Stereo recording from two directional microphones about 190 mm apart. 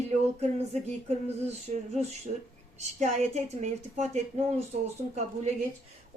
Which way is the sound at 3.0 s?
35° right (ahead or behind).